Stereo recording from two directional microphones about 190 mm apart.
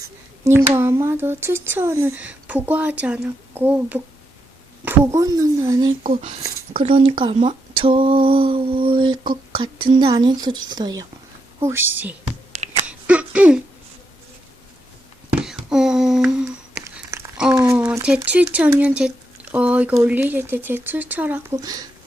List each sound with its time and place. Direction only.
0.4 s speech: 15° right (ahead or behind)
12.5 s finger snapping: 35° right (ahead or behind)
12.9 s a sound: 5° right (ahead or behind)
15.4 s a sound: 5° right (ahead or behind)
17.5 s speech: 15° right (ahead or behind)
21.6 s speech: 20° right (ahead or behind)